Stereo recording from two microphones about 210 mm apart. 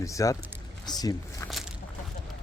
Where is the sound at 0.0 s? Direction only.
15° left (ahead or behind).